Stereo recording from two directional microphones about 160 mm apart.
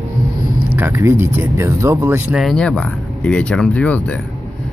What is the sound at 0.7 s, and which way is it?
Speech, 15° right (ahead or behind).